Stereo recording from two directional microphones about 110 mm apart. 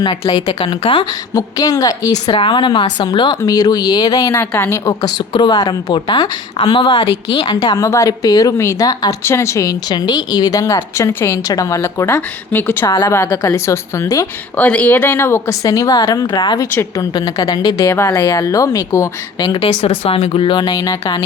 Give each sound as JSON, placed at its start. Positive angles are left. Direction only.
{"t": 0.7, "sound": "speech", "side_deg": 55}
{"t": 1.3, "sound": "a woman's voice", "side_deg": 35}
{"t": 2.3, "sound": "a woman's voice", "side_deg": 50}
{"t": 4.9, "sound": "a woman's voice", "side_deg": 40}
{"t": 9.2, "sound": "a woman's voice", "side_deg": 25}
{"t": 12.9, "sound": "a woman's voice", "side_deg": 30}
{"t": 14.5, "sound": "a woman's voice", "side_deg": 15}
{"t": 17.8, "sound": "a woman's voice", "side_deg": 25}
{"t": 19.5, "sound": "speech", "side_deg": 60}